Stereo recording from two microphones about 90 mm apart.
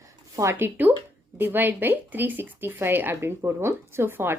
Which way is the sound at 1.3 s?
20° right (ahead or behind).